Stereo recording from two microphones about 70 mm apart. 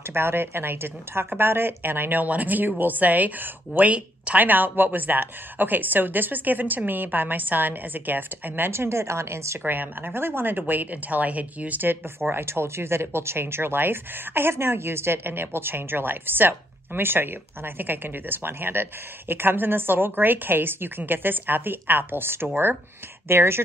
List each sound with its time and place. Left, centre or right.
0.1 s a woman's voice: right
9.7 s a woman's voice: right